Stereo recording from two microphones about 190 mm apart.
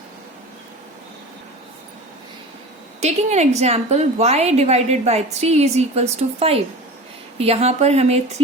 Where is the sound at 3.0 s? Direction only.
35° right (ahead or behind).